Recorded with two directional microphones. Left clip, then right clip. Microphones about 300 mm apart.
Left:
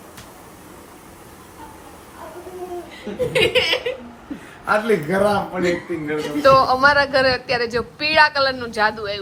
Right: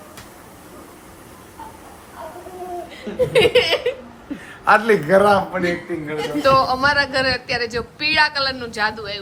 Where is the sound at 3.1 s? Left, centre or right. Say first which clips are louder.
Right 3 dB; right.